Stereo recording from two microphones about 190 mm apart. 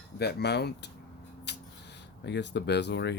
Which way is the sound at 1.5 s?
65° left (ahead or behind).